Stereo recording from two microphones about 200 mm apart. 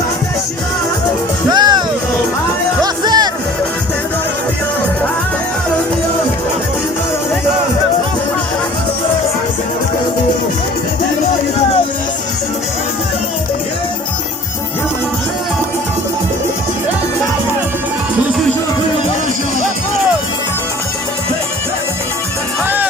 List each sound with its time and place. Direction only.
1.5 s music: 20° right (ahead or behind)
2.8 s music: 20° right (ahead or behind)